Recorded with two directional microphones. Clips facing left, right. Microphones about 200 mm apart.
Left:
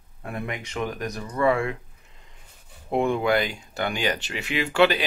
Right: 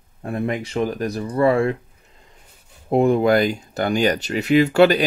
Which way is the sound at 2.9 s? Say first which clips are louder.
Right 6 dB; 40° right (ahead or behind).